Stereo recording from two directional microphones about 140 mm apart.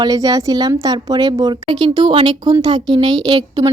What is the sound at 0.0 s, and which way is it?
A woman's voice, 25° right (ahead or behind).